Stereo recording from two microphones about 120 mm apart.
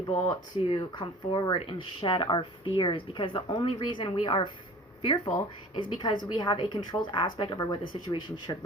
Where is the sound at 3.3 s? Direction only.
30° left (ahead or behind).